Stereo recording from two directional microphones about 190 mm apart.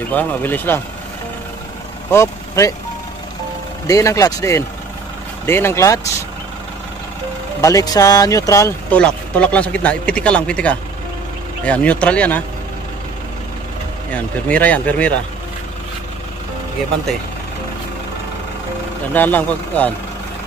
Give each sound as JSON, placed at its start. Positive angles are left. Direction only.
{"t": 0.1, "sound": "speech", "side_deg": 10}
{"t": 2.0, "sound": "speech", "side_deg": 15}
{"t": 3.8, "sound": "speech", "side_deg": 15}
{"t": 7.6, "sound": "speech", "side_deg": 20}
{"t": 14.1, "sound": "speech", "side_deg": 5}
{"t": 19.1, "sound": "speech", "side_deg": 10}